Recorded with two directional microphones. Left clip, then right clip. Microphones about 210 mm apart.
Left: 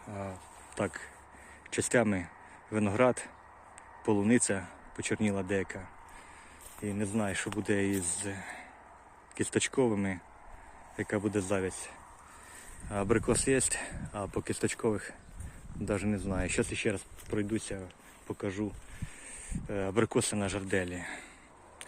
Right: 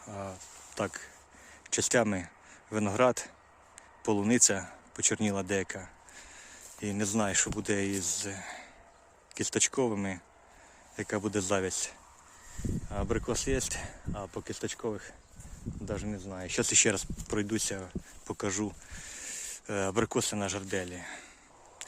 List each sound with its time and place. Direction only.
0.1 s a sound: 15° right (ahead or behind)
0.8 s speech: 10° right (ahead or behind)
12.9 s speech: centre (ahead or behind)
16.6 s speech: 30° right (ahead or behind); by 21.2 s centre (ahead or behind)